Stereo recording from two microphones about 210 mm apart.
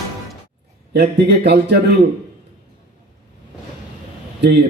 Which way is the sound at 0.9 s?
50° right (ahead or behind).